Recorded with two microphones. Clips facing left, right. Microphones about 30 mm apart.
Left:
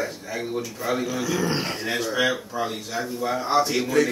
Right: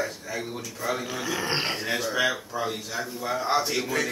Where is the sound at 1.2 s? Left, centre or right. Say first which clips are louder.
Right 1 dB; right.